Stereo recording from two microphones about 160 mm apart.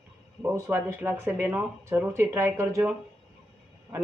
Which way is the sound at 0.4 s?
15° right (ahead or behind).